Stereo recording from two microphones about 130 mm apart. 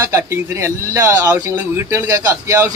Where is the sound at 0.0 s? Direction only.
20° right (ahead or behind).